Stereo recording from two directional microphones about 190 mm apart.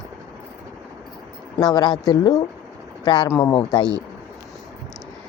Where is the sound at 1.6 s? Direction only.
20° left (ahead or behind).